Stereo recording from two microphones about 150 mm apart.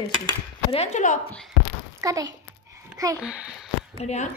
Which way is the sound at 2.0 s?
25° right (ahead or behind).